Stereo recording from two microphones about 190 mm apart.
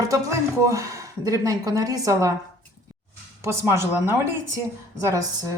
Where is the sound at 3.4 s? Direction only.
15° right (ahead or behind).